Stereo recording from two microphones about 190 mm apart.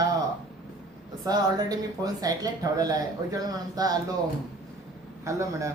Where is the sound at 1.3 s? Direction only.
20° right (ahead or behind).